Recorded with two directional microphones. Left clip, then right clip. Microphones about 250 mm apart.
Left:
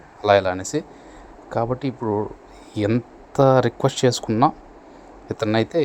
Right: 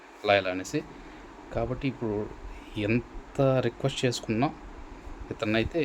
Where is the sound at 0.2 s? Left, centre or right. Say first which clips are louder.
Left 7 dB; centre.